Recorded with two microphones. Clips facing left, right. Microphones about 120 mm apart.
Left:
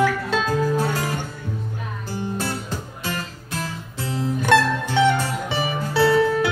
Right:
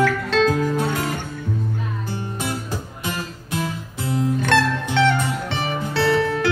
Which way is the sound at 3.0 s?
20° right (ahead or behind).